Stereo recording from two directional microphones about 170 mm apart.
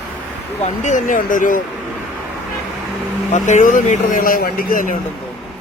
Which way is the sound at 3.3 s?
45° left (ahead or behind).